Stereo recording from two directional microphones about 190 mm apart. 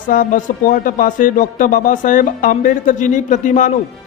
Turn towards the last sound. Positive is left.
turn(degrees=40)  # may be behind; listen again after turning